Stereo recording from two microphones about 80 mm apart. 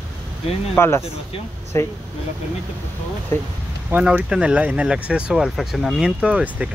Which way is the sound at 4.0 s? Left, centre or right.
Centre.